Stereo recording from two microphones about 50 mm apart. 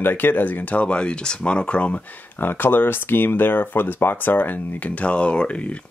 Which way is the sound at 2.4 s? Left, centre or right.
Left.